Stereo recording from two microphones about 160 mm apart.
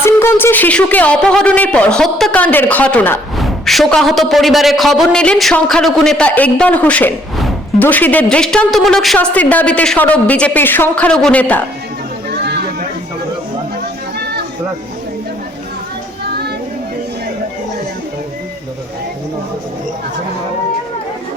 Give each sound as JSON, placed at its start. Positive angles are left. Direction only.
{"t": 0.0, "sound": "a woman's voice", "side_deg": 15}
{"t": 12.3, "sound": "chatter", "side_deg": -90}